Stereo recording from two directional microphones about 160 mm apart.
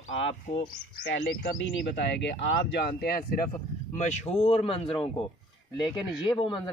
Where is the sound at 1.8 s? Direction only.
90° left.